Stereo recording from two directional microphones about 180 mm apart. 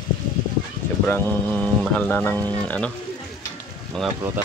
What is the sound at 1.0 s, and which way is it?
Speech, 10° left (ahead or behind).